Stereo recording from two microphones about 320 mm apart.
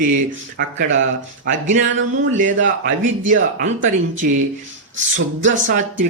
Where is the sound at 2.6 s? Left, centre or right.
Right.